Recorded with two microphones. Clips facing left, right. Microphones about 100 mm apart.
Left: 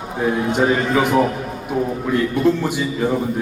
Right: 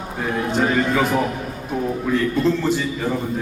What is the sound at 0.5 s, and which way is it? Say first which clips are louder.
Speech: even; 20° left (ahead or behind).